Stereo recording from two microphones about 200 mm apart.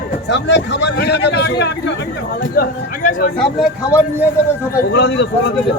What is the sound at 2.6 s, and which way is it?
Speech, 45° left (ahead or behind).